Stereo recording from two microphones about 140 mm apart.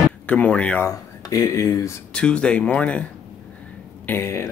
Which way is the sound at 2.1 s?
5° left (ahead or behind).